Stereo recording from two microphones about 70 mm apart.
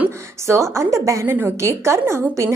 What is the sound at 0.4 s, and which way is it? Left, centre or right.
A woman's voice, right.